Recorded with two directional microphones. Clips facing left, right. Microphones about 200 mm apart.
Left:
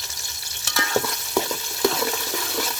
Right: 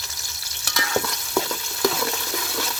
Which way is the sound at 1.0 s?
10° left (ahead or behind).